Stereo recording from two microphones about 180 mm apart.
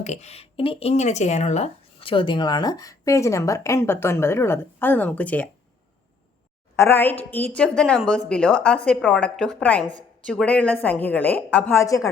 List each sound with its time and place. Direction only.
0.0 s speech: 40° left (ahead or behind); by 5.5 s 10° left (ahead or behind)
6.7 s a woman's voice: 10° left (ahead or behind)